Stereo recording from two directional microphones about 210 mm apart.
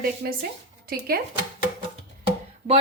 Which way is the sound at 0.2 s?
50° right (ahead or behind).